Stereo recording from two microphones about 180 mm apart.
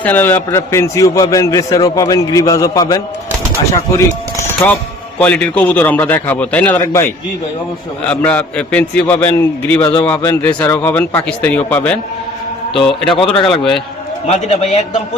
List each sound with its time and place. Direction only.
0.0 s a man's voice: 10° left (ahead or behind)
14.3 s a man's voice: 35° left (ahead or behind)